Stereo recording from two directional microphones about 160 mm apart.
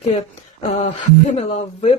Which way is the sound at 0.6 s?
45° left (ahead or behind).